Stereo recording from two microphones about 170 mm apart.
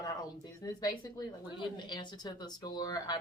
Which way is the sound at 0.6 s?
25° left (ahead or behind).